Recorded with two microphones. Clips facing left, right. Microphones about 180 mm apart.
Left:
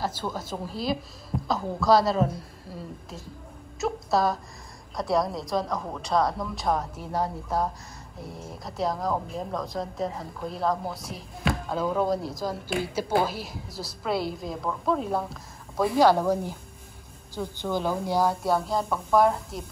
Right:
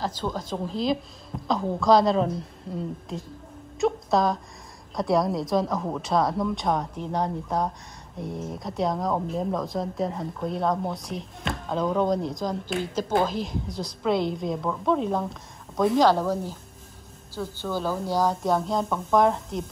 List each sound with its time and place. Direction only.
0.0 s speech: 10° left (ahead or behind)